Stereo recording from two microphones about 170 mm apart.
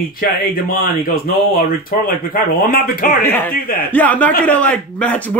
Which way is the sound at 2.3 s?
55° left (ahead or behind).